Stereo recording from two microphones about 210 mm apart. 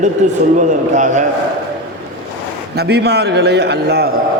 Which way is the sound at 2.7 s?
50° right (ahead or behind).